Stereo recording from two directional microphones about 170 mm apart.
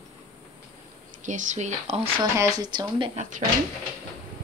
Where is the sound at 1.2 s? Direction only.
45° right (ahead or behind).